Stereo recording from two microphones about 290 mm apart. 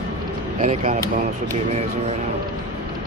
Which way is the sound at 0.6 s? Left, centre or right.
Right.